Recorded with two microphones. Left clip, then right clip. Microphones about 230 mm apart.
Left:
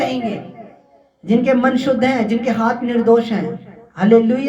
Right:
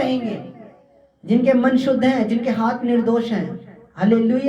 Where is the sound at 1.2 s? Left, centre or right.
Left.